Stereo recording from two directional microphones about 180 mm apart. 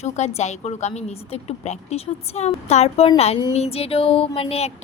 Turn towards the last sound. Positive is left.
turn(degrees=30)  # may be behind; listen again after turning